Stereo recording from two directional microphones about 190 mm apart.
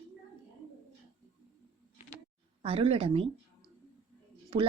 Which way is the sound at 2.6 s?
30° right (ahead or behind).